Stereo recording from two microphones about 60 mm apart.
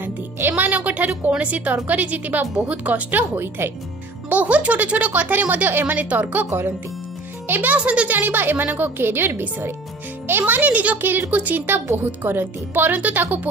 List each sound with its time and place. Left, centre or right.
0.0 s speech: right
3.3 s speech: right
4.3 s speech: right
7.4 s speech: right